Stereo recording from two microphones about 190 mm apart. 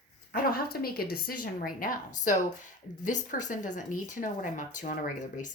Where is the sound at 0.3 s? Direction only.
50° left (ahead or behind).